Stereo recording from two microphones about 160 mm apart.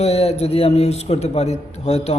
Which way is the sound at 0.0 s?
40° left (ahead or behind).